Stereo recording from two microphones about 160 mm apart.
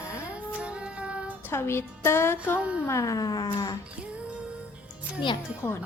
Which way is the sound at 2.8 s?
20° left (ahead or behind).